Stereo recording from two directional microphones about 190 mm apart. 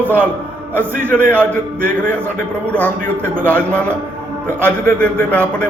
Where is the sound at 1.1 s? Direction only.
10° left (ahead or behind).